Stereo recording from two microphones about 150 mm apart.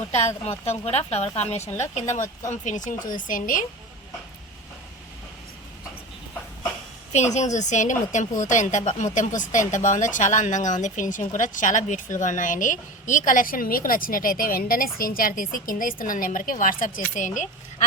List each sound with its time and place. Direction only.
0.1 s a woman's voice: 50° left (ahead or behind)
7.1 s a woman's voice: 50° left (ahead or behind)